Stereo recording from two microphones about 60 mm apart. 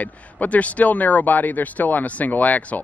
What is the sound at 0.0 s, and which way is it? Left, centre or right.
Speech, left.